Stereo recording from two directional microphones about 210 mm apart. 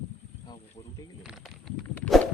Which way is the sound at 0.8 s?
30° left (ahead or behind).